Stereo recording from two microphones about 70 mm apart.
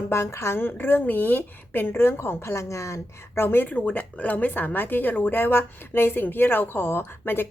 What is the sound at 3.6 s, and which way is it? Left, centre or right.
A woman's voice, left.